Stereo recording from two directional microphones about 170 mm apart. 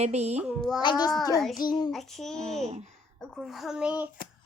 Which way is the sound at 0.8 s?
25° left (ahead or behind).